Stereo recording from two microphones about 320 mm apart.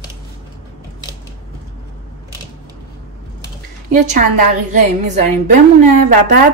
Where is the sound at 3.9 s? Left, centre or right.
Right.